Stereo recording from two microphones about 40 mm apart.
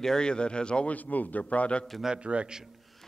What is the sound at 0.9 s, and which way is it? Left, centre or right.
Speech, left.